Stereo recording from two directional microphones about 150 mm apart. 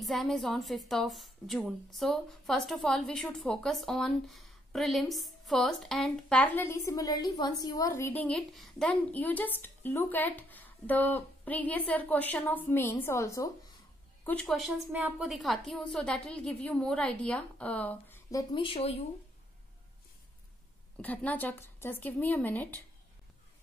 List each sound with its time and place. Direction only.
0.0 s a woman's voice: centre (ahead or behind); by 13.5 s 20° left (ahead or behind)
14.2 s a woman's voice: 5° left (ahead or behind)
14.9 s a woman's voice: 10° right (ahead or behind); by 18.4 s 15° left (ahead or behind)
18.5 s speech: 35° left (ahead or behind)
21.0 s a woman's voice: 10° left (ahead or behind)